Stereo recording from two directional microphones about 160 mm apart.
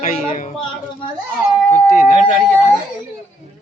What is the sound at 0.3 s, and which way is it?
Speech, 50° left (ahead or behind).